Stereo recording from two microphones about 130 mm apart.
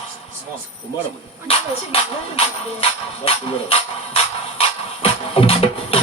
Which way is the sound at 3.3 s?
50° left (ahead or behind).